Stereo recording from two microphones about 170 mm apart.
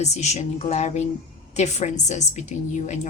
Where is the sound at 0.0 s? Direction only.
40° left (ahead or behind).